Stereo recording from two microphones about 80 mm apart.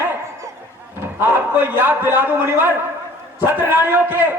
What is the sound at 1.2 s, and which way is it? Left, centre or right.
A man's voice, right.